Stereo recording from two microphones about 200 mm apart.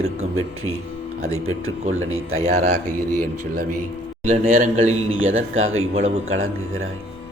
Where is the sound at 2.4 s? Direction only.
35° right (ahead or behind).